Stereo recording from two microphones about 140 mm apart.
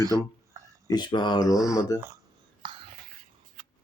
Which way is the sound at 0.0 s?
25° right (ahead or behind).